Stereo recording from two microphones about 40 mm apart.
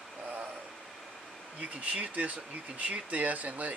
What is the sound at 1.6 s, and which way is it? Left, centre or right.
Speech, right.